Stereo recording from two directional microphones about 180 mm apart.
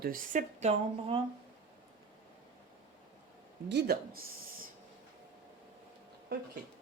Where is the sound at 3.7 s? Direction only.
60° right (ahead or behind).